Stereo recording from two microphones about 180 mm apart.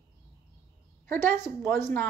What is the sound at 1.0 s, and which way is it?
Speech, 10° left (ahead or behind).